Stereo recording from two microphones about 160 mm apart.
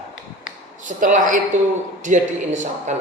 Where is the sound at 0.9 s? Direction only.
50° right (ahead or behind).